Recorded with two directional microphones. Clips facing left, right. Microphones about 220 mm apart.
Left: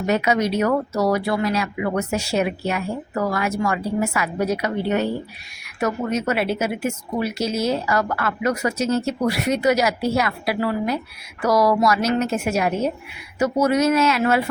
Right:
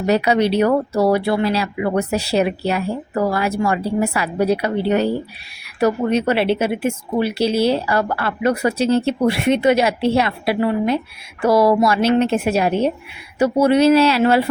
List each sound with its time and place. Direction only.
0.0 s speech: 35° right (ahead or behind)